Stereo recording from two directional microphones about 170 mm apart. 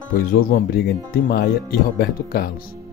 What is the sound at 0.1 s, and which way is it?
Speech, 60° left (ahead or behind).